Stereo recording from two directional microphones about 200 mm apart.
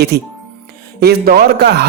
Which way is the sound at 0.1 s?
55° right (ahead or behind).